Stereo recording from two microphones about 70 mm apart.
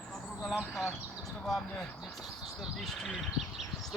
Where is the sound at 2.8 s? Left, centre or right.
Centre.